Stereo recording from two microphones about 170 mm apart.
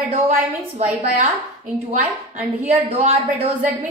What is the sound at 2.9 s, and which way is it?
Speech, 35° right (ahead or behind).